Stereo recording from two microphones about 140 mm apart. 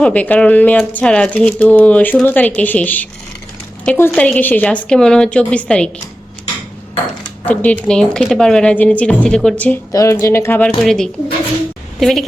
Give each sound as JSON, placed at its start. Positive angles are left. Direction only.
{"t": 0.0, "sound": "speech", "side_deg": 10}
{"t": 7.4, "sound": "speech", "side_deg": 10}
{"t": 9.9, "sound": "speech", "side_deg": 25}
{"t": 10.8, "sound": "a woman's voice", "side_deg": 5}